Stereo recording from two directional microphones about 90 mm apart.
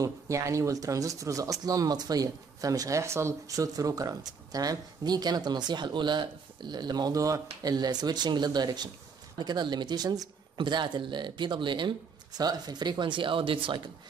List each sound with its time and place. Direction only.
0.0 s speech: 35° right (ahead or behind); by 13.7 s 80° right